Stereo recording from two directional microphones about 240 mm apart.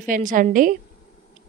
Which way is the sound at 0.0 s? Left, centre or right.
Right.